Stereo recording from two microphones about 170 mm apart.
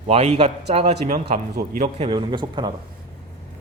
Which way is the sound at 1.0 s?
55° right (ahead or behind).